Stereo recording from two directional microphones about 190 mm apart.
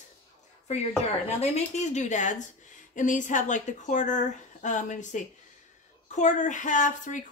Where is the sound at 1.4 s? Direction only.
35° left (ahead or behind).